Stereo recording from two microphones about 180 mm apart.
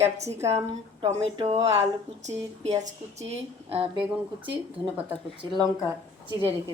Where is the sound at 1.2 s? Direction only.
35° right (ahead or behind).